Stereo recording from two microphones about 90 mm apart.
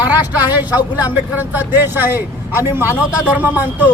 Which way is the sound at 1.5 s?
25° right (ahead or behind).